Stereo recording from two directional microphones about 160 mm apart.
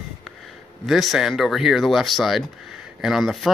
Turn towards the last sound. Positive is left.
turn(degrees=0)  # may be behind; listen again after turning